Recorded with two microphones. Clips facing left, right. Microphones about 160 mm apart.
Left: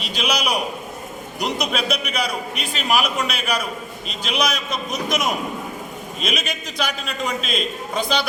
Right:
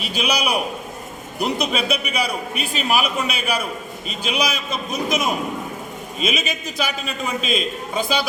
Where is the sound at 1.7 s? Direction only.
5° right (ahead or behind).